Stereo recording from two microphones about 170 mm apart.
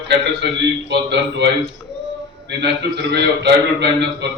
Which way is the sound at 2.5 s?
90° right.